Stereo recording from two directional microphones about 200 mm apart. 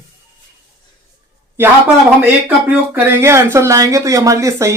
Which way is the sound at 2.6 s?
10° right (ahead or behind).